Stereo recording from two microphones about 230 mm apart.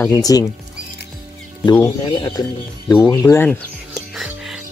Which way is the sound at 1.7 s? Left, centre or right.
Centre.